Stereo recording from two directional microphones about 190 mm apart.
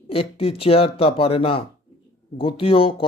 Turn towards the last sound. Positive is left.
turn(degrees=30)  # may be behind; listen again after turning